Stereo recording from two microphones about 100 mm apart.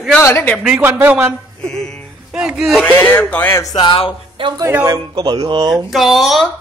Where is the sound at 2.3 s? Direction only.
5° right (ahead or behind).